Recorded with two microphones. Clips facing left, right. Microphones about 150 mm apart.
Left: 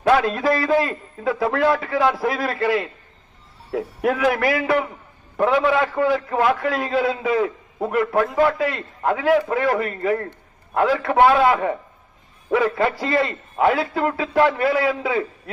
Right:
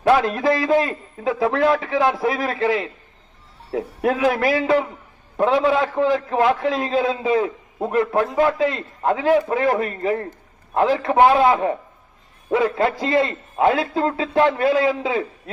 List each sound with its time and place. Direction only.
0.1 s a man's voice: 20° right (ahead or behind)